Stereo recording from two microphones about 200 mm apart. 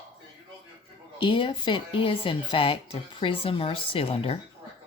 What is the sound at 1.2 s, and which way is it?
A woman's voice, 25° left (ahead or behind).